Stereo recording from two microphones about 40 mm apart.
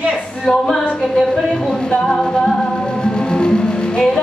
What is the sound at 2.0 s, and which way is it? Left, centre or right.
Music, centre.